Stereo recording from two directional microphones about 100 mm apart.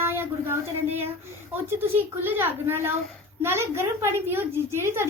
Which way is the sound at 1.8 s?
20° right (ahead or behind).